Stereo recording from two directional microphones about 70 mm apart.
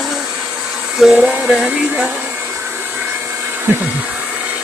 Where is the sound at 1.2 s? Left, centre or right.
Right.